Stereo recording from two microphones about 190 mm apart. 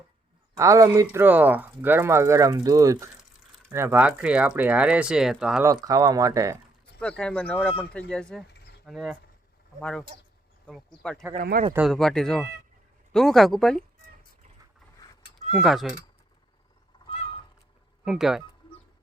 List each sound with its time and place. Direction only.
0.5 s speech: 15° right (ahead or behind)
5.6 s speech: 20° right (ahead or behind)
7.0 s speech: 5° left (ahead or behind)
11.3 s speech: 50° right (ahead or behind)
11.9 s speech: centre (ahead or behind)
15.6 s speech: centre (ahead or behind)
18.0 s speech: 5° right (ahead or behind)